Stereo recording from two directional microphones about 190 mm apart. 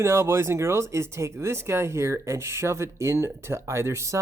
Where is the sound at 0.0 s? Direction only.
15° right (ahead or behind).